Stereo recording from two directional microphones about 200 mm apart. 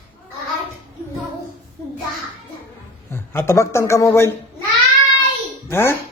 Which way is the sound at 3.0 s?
10° left (ahead or behind).